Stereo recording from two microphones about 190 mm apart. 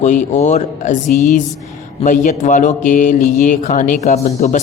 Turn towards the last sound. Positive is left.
turn(degrees=35)  # may be behind; listen again after turning